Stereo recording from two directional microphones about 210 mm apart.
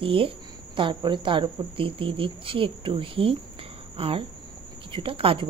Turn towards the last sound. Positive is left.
turn(degrees=-25)  # may be behind; listen again after turning